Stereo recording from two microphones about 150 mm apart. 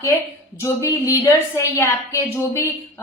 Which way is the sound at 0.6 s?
20° left (ahead or behind).